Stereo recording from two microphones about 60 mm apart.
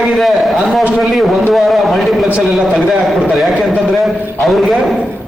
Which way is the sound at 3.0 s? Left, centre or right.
Centre.